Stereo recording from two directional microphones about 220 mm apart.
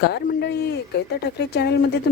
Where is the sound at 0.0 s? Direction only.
50° left (ahead or behind).